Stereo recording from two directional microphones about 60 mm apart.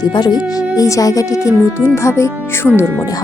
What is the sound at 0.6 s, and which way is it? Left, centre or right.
Speech, left.